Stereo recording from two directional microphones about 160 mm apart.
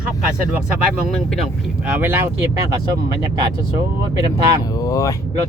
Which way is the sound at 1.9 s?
15° right (ahead or behind).